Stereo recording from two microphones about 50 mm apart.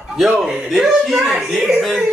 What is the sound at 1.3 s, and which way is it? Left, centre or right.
Speech, centre.